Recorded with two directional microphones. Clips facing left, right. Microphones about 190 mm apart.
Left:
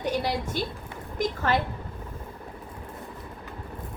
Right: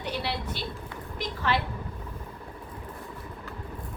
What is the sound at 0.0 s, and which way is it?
A woman's voice, 45° left (ahead or behind).